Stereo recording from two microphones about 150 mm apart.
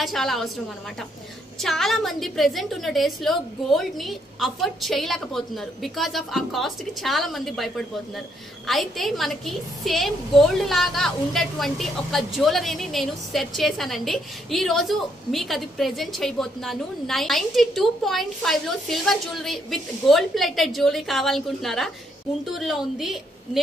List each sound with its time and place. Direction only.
0.0 s a woman's voice: centre (ahead or behind)
1.6 s a woman's voice: centre (ahead or behind)